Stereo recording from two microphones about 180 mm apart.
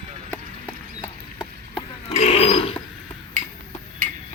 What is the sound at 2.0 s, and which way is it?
Burping, 35° left (ahead or behind).